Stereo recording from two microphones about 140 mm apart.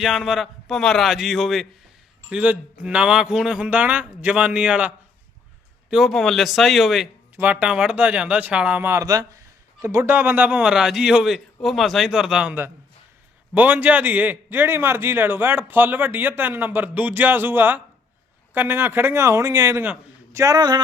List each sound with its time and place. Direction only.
0.0 s speech: centre (ahead or behind)
7.3 s speech: 10° right (ahead or behind)
20.4 s speech: 25° right (ahead or behind)